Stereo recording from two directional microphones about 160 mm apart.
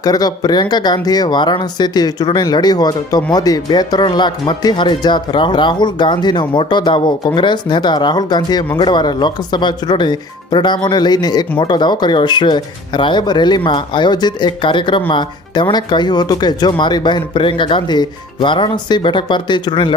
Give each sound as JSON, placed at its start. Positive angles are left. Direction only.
{"t": 0.0, "sound": "speech", "side_deg": 25}